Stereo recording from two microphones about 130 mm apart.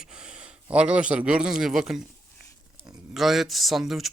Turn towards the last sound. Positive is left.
turn(degrees=0)  # may be behind; listen again after turning